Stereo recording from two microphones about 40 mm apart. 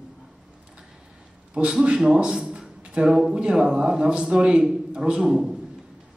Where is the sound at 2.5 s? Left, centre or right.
Right.